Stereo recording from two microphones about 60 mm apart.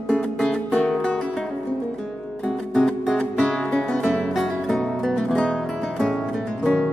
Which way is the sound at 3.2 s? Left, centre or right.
Centre.